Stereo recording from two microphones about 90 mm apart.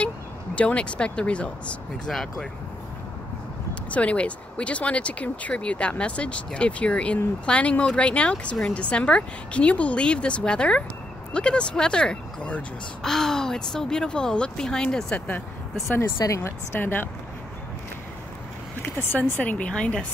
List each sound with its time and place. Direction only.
0.6 s speech: 10° left (ahead or behind)
3.9 s speech: 15° left (ahead or behind)
16.2 s speech: 35° left (ahead or behind)
19.1 s speech: 15° left (ahead or behind)